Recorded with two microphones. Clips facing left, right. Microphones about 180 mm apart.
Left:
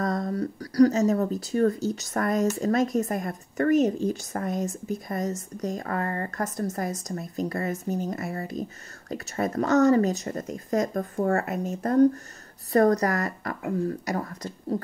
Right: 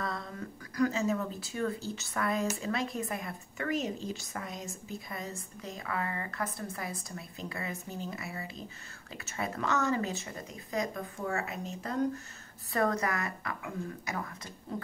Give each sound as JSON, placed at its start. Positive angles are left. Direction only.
{"t": 0.0, "sound": "speech", "side_deg": 45}